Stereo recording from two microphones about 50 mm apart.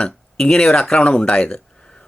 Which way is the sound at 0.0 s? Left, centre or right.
Centre.